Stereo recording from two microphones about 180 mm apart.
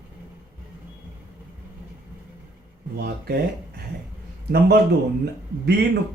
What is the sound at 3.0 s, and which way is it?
Speech, 60° right (ahead or behind).